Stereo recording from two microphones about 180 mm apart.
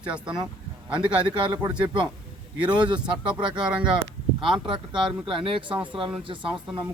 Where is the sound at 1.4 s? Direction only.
25° right (ahead or behind).